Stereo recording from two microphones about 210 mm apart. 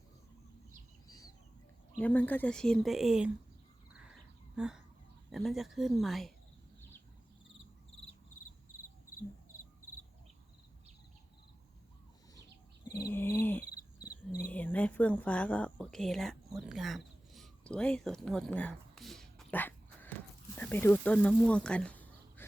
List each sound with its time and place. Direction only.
1.0 s bird: 15° left (ahead or behind)
2.0 s speech: 5° left (ahead or behind)
4.5 s speech: 5° right (ahead or behind)
13.1 s cricket: 10° left (ahead or behind)
14.5 s speech: 5° left (ahead or behind)
16.6 s a sound: centre (ahead or behind)
20.6 s speech: 10° left (ahead or behind)